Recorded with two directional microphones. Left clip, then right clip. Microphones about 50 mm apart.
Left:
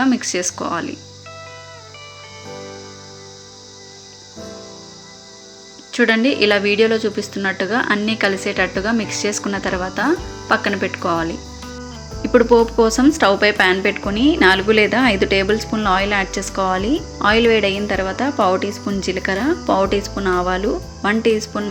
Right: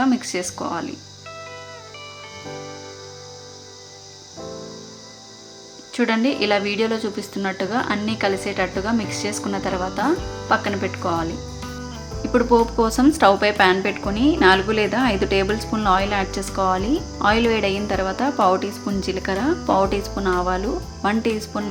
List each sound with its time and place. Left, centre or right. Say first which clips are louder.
0.0 s speech: left 3 dB; left
2.5 s music: left 2 dB; centre
5.9 s speech: left 5 dB; left
10.2 s music: right 1 dB; centre
10.5 s speech: left 3 dB; left
12.5 s speech: left 4 dB; left
14.3 s speech: left 3 dB; left
15.4 s speech: left 2 dB; centre; by 20.7 s left
21.0 s speech: left 5 dB; centre